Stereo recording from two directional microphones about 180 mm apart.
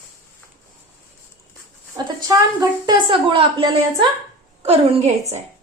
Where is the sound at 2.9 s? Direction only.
25° right (ahead or behind).